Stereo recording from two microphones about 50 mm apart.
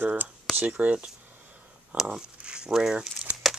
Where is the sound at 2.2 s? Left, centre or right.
Centre.